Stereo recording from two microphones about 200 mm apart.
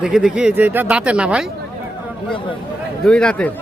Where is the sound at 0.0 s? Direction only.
5° right (ahead or behind).